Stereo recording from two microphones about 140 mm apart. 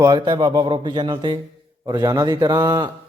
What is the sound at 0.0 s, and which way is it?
A man's voice, 30° right (ahead or behind).